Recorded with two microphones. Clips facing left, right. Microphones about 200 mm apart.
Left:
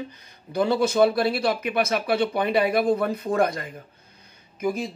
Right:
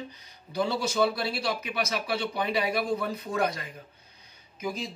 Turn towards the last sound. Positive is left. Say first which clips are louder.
# left 7 dB
turn(degrees=50)  # may be behind; listen again after turning